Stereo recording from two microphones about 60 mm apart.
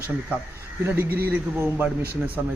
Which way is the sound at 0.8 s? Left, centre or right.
Right.